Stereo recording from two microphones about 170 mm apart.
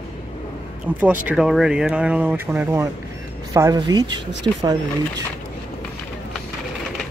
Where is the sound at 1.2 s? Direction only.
5° right (ahead or behind); by 4.2 s 25° right (ahead or behind).